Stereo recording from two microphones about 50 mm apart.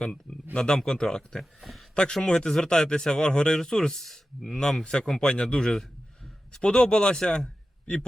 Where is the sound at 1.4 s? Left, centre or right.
Centre.